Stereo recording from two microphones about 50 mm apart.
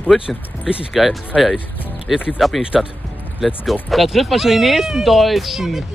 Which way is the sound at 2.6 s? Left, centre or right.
Centre.